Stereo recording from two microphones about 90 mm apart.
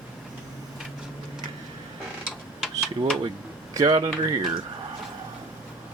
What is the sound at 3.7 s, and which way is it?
Speech, 45° right (ahead or behind).